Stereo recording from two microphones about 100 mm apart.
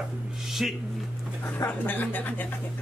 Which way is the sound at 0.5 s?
5° right (ahead or behind).